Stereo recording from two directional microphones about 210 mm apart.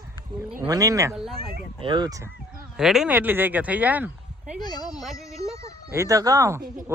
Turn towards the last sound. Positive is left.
turn(degrees=-15)  # may be behind; listen again after turning